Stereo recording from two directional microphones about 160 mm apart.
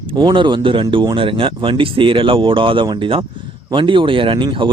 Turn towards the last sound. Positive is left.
turn(degrees=-30)  # may be behind; listen again after turning